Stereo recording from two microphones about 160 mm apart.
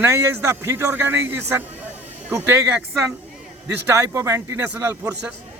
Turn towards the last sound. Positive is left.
turn(degrees=-10)  # may be behind; listen again after turning